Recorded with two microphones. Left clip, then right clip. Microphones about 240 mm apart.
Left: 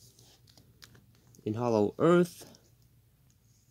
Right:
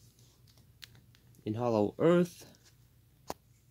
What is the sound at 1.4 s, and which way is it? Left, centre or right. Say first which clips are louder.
Speech: left 2 dB; centre.